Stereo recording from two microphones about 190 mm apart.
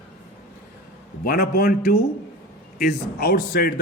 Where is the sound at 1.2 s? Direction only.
50° left (ahead or behind).